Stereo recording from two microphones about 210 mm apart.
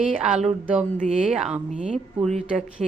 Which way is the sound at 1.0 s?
35° right (ahead or behind).